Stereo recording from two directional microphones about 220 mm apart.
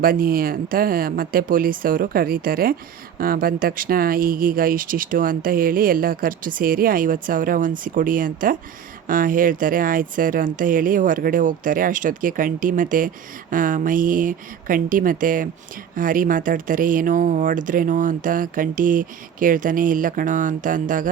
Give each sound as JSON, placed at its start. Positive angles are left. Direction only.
{"t": 0.0, "sound": "speech", "side_deg": -40}